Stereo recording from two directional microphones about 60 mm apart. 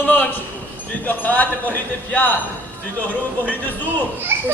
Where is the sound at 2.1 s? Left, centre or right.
Left.